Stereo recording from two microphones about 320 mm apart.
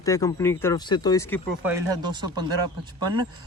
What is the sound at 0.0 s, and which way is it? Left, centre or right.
Speech, centre.